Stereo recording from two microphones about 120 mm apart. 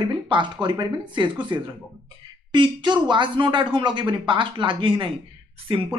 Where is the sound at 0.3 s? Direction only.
40° right (ahead or behind).